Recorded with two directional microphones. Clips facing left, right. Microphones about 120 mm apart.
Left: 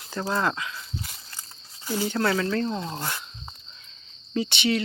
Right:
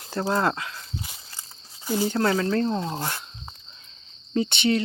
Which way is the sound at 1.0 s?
10° right (ahead or behind).